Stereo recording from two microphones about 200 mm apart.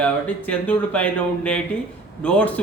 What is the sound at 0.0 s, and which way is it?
A man's voice, 5° left (ahead or behind).